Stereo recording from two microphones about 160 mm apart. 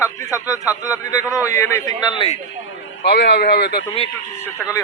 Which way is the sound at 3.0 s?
90° left.